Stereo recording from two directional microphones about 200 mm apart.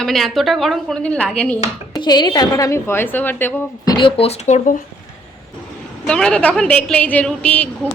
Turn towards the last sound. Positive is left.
turn(degrees=5)  # may be behind; listen again after turning